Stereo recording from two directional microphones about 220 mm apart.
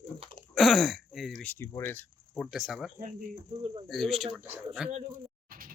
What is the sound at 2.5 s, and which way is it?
Speech, centre (ahead or behind).